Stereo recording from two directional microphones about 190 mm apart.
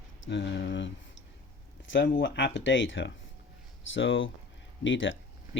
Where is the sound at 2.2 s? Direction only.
70° left (ahead or behind).